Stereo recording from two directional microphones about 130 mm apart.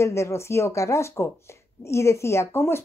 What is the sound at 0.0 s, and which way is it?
A woman's voice, 20° left (ahead or behind).